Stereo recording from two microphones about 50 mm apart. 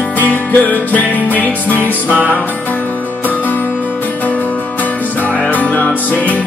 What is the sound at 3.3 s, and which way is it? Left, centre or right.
Music, left.